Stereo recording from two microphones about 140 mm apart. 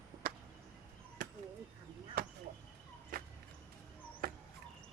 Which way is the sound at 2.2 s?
90° right.